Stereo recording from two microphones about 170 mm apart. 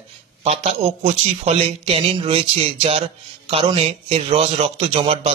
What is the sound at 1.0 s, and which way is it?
A man's voice, 35° right (ahead or behind).